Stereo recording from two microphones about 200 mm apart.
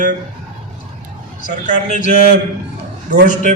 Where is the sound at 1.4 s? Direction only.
40° right (ahead or behind).